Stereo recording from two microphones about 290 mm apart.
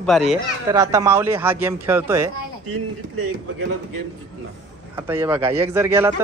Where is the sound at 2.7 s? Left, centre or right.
Right.